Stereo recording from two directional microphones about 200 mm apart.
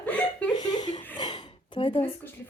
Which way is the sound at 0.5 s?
20° left (ahead or behind).